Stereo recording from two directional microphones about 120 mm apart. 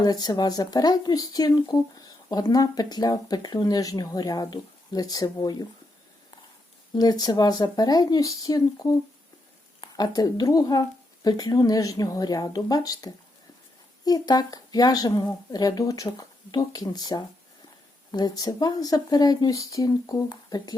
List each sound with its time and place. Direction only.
0.0 s speech: 35° left (ahead or behind)
6.9 s speech: 35° left (ahead or behind)